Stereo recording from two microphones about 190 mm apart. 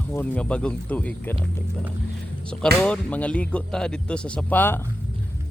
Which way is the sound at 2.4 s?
5° left (ahead or behind).